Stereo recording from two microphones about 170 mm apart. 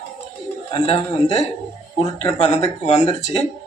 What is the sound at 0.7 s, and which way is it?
Speech, 35° left (ahead or behind).